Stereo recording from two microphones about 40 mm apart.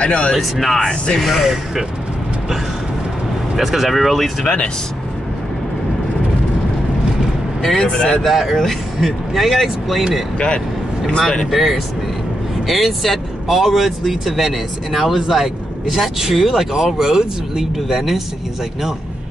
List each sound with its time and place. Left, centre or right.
0.0 s speech: left
0.3 s speech: centre
0.7 s speech: centre
1.2 s speech: centre
3.5 s speech: centre
7.7 s speech: left
8.3 s speech: centre
11.5 s speech: centre